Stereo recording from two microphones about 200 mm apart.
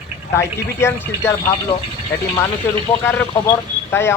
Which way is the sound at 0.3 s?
15° left (ahead or behind).